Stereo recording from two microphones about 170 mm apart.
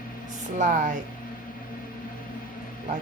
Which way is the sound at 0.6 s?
45° right (ahead or behind).